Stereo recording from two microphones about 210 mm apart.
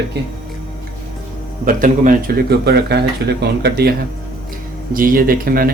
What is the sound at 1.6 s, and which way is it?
Speech, 40° right (ahead or behind).